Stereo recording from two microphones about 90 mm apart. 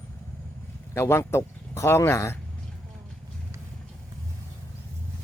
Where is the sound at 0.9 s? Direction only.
30° left (ahead or behind).